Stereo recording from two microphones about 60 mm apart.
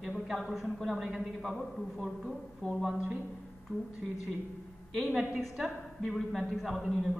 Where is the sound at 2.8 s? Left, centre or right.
Right.